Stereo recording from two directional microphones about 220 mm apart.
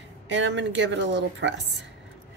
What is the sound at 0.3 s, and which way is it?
Speech, 55° right (ahead or behind).